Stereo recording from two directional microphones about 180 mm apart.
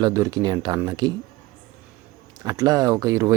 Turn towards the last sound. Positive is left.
turn(degrees=-20)  # may be behind; listen again after turning